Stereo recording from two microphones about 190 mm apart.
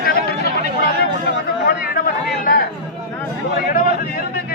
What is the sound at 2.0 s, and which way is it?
Chatter, 50° left (ahead or behind).